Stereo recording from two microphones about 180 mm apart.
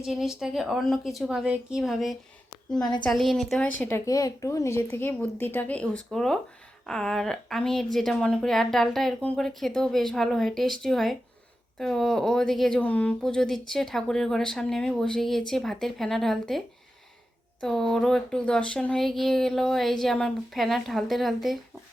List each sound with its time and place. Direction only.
0.0 s speech: centre (ahead or behind)